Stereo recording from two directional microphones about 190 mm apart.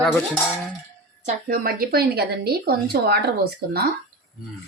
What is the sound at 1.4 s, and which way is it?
Speech, 50° right (ahead or behind).